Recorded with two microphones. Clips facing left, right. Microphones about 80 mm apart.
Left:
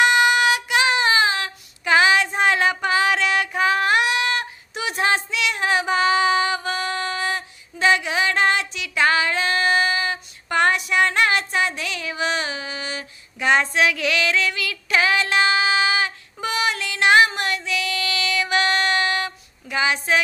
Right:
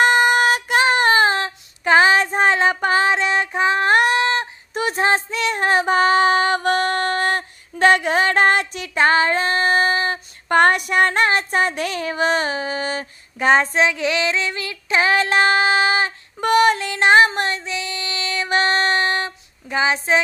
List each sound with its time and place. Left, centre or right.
0.0 s child singing: right
2.8 s a sound: right
3.9 s a sound: right
4.7 s child singing: right
15.0 s child singing: right
16.7 s music: right